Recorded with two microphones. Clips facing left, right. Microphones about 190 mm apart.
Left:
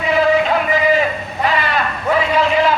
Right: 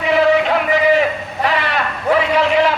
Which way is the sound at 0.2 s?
75° right (ahead or behind).